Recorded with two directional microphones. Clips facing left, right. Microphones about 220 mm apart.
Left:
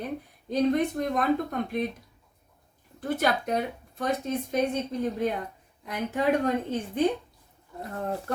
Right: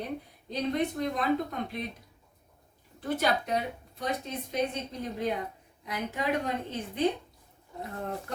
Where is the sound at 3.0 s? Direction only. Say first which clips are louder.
Left 2 dB; 50° left (ahead or behind).